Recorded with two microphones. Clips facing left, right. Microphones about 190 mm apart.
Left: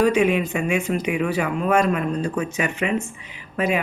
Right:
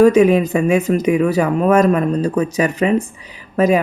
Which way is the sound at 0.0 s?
40° right (ahead or behind).